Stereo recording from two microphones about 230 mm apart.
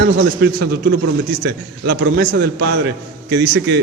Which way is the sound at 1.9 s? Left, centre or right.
Right.